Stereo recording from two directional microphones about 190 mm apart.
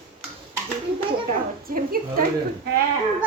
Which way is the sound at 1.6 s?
45° right (ahead or behind).